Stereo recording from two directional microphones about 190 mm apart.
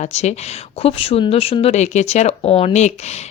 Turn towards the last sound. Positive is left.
turn(degrees=35)  # may be behind; listen again after turning